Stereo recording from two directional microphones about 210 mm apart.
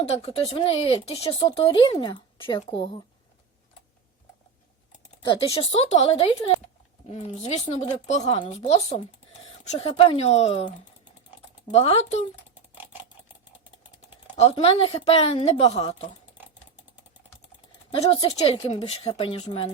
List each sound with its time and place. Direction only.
0.2 s speech: 25° left (ahead or behind)
5.2 s speech: 25° left (ahead or behind)
12.5 s a sound: 10° right (ahead or behind)
14.3 s speech: 30° left (ahead or behind)
17.9 s speech: 25° left (ahead or behind)